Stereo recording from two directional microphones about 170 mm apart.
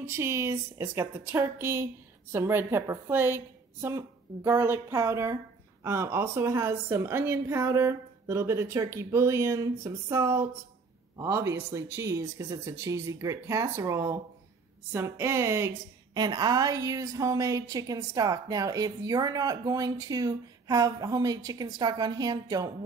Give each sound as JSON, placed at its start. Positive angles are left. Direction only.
{"t": 0.0, "sound": "a woman's voice", "side_deg": -15}